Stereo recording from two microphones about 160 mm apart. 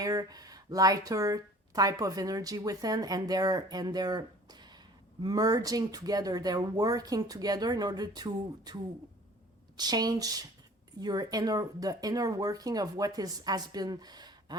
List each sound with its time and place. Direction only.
0.0 s a woman's voice: 25° right (ahead or behind)